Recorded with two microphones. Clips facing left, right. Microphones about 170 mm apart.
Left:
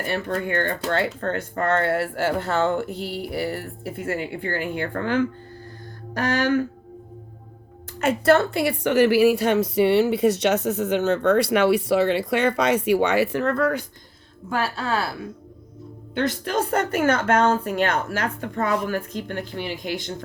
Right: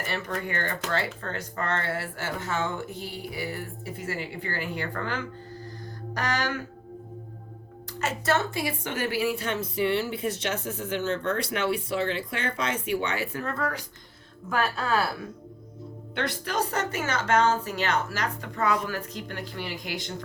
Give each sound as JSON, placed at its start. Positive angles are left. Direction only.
{"t": 0.9, "sound": "speech", "side_deg": 55}
{"t": 8.0, "sound": "a woman's voice", "side_deg": 60}
{"t": 14.5, "sound": "speech", "side_deg": 30}
{"t": 16.2, "sound": "speech", "side_deg": 50}